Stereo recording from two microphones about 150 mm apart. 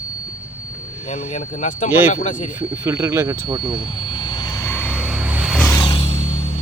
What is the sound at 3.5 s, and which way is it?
Speech, 35° right (ahead or behind).